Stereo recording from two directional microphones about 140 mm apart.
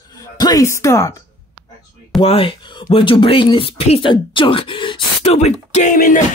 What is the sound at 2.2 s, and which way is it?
Speech, 40° left (ahead or behind).